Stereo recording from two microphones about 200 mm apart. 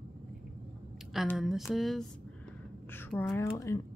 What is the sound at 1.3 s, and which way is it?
Speech, centre (ahead or behind).